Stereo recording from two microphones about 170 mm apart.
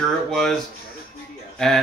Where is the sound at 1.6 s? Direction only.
5° left (ahead or behind).